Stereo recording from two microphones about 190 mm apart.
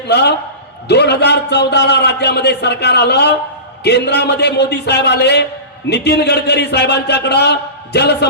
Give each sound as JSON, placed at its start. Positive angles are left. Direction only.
{"t": 0.1, "sound": "a man's voice", "side_deg": 60}